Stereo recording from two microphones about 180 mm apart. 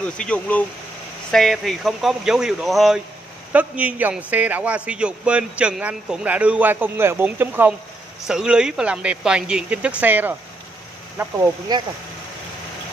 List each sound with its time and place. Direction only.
0.0 s a man's voice: 5° left (ahead or behind); by 11.8 s 15° right (ahead or behind)